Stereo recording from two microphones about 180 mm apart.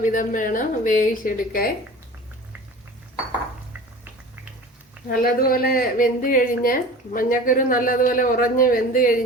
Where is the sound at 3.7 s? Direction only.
10° right (ahead or behind).